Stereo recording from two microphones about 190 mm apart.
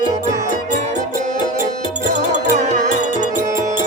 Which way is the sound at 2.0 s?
40° right (ahead or behind).